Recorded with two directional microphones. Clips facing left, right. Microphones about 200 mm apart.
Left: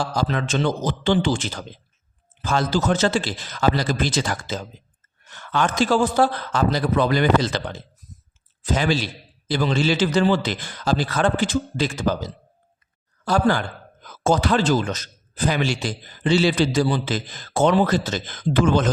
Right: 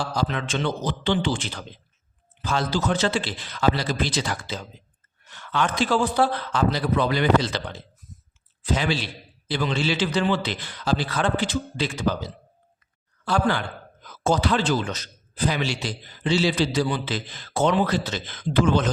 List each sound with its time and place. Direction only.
0.2 s a man's voice: 40° left (ahead or behind)
16.8 s a man's voice: 45° left (ahead or behind)